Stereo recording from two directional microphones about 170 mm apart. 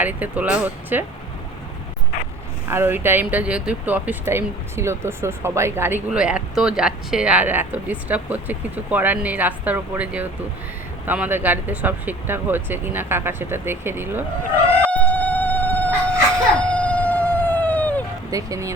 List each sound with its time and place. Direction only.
0.0 s speech: 10° right (ahead or behind)
2.6 s speech: 15° right (ahead or behind)
14.8 s a sound: 10° left (ahead or behind)
18.3 s speech: 20° right (ahead or behind)